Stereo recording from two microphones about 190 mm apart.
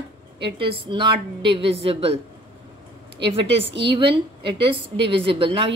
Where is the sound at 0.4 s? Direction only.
25° right (ahead or behind).